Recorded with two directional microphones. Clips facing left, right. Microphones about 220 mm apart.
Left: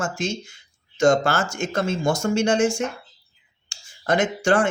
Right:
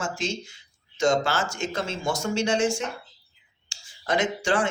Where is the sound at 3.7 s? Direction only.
45° left (ahead or behind).